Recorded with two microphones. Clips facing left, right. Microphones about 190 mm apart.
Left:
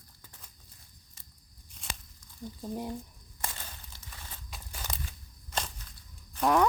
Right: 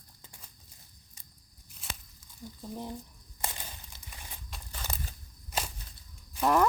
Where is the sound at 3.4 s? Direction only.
15° right (ahead or behind).